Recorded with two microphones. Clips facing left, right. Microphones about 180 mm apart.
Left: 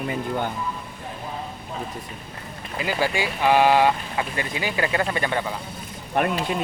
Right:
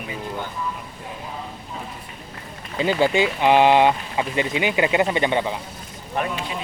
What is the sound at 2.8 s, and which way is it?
Speech, 25° right (ahead or behind).